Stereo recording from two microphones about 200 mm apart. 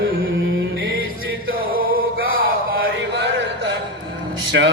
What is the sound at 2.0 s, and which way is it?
Chant, 90° right.